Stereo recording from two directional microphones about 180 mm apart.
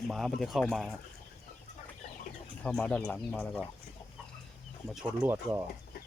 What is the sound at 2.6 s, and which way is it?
Speech, 5° left (ahead or behind).